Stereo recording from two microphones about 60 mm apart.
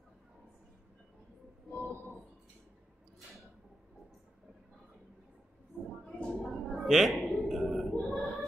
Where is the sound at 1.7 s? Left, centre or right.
Left.